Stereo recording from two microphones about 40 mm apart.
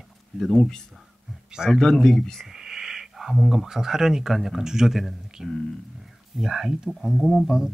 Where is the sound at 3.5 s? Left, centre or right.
Centre.